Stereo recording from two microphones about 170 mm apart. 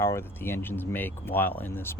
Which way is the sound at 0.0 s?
15° left (ahead or behind).